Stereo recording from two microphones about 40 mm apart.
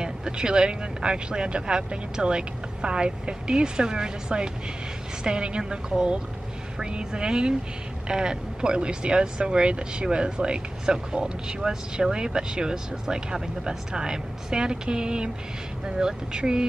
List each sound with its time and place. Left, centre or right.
0.0 s speech: centre